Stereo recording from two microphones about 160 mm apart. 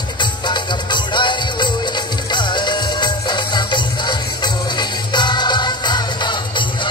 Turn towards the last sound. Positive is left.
turn(degrees=30)  # may be behind; listen again after turning